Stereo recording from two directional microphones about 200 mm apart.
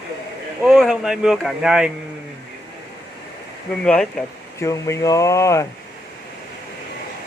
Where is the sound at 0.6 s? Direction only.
Centre (ahead or behind).